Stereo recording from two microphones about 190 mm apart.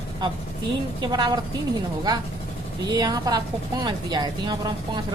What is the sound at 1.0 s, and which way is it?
Speech, 20° right (ahead or behind).